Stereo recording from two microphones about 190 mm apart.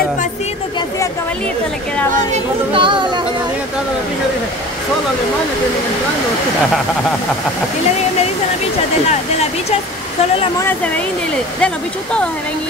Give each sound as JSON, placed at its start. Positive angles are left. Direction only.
{"t": 2.3, "sound": "music", "side_deg": -25}
{"t": 11.6, "sound": "speech", "side_deg": 5}